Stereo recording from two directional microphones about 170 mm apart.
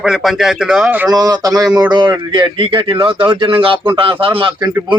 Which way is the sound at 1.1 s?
20° right (ahead or behind).